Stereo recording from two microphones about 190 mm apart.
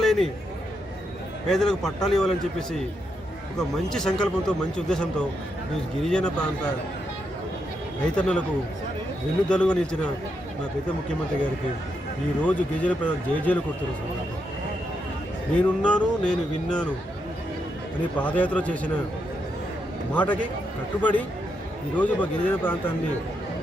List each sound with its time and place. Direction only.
0.0 s a sound: centre (ahead or behind)
1.5 s speech: 5° left (ahead or behind)
8.1 s speech: 5° left (ahead or behind)
9.5 s speech: 5° left (ahead or behind)
12.5 s speech: 5° left (ahead or behind)
15.5 s speech: 5° left (ahead or behind)
18.2 s speech: 10° left (ahead or behind)
20.1 s speech: 5° left (ahead or behind)